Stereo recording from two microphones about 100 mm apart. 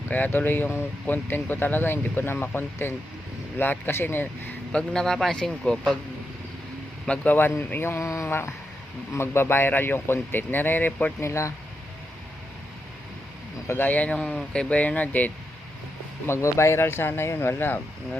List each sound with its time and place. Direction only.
0.1 s speech: 20° left (ahead or behind)
4.7 s a man's voice: 10° left (ahead or behind)
7.0 s speech: 15° left (ahead or behind)
11.3 s speech: 30° left (ahead or behind)
13.7 s speech: 20° left (ahead or behind)
16.2 s speech: 25° left (ahead or behind)